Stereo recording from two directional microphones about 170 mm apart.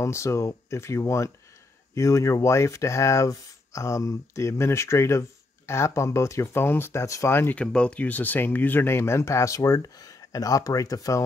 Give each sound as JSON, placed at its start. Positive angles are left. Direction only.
{"t": 0.0, "sound": "speech", "side_deg": 15}